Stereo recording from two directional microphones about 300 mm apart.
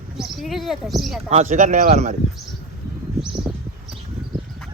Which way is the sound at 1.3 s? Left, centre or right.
Right.